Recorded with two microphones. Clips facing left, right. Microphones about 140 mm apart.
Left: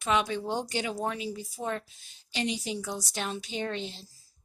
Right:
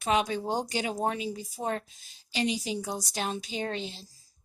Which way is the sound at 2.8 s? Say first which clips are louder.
Right 1 dB; 45° right (ahead or behind).